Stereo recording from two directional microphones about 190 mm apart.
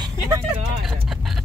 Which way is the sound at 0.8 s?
Centre (ahead or behind).